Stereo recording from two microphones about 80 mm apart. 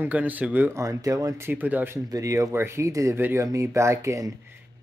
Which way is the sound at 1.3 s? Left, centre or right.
Right.